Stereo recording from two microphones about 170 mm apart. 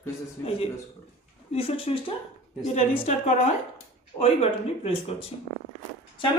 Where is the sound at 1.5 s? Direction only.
35° left (ahead or behind).